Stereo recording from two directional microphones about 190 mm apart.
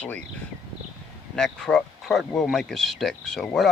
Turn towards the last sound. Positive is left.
turn(degrees=0)  # may be behind; listen again after turning